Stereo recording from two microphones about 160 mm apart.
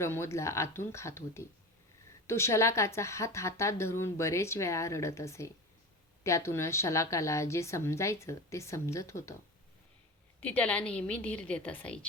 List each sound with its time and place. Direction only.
0.0 s a woman's voice: 15° left (ahead or behind)
10.4 s a woman's voice: 10° left (ahead or behind)